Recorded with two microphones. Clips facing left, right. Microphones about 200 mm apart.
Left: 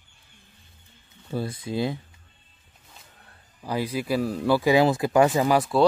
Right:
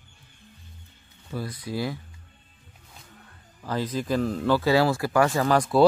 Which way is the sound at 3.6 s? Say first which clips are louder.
Left 1 dB; 10° left (ahead or behind).